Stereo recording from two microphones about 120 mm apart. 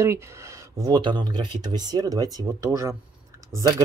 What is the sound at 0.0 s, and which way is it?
Speech, 25° right (ahead or behind).